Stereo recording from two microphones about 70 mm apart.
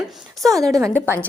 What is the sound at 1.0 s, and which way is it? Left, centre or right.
Speech, right.